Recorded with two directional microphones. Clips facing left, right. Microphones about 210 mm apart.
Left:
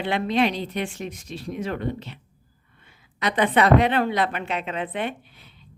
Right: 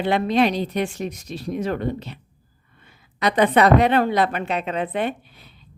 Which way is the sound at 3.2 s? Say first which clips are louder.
Right 4 dB; 40° right (ahead or behind).